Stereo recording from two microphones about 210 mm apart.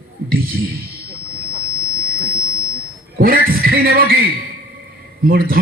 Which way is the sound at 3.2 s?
45° right (ahead or behind).